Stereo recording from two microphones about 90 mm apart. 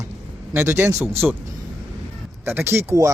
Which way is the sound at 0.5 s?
30° right (ahead or behind).